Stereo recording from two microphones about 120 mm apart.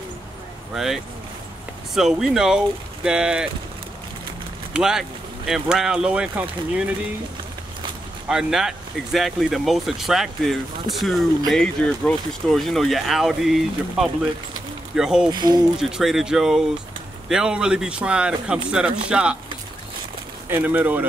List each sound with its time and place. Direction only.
0.7 s speech: centre (ahead or behind)
4.7 s speech: 5° right (ahead or behind)
8.3 s speech: 5° right (ahead or behind)
15.3 s speech: 35° right (ahead or behind)
15.8 s speech: 5° right (ahead or behind)
20.4 s speech: 15° right (ahead or behind)